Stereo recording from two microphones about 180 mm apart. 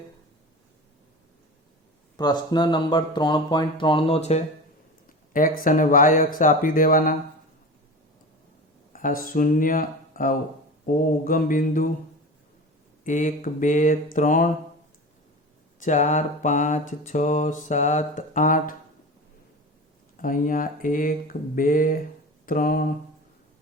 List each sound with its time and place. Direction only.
2.1 s speech: 25° left (ahead or behind)
5.3 s mantra: 50° left (ahead or behind)
8.9 s speech: 50° left (ahead or behind)
10.9 s mantra: 50° left (ahead or behind)
13.1 s mantra: 45° left (ahead or behind)
15.8 s mantra: 40° left (ahead or behind)
20.1 s mantra: 50° left (ahead or behind)